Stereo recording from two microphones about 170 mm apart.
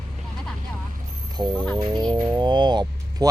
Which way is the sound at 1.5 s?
5° left (ahead or behind).